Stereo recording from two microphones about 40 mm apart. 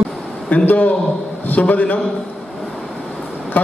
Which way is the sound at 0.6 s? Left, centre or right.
Left.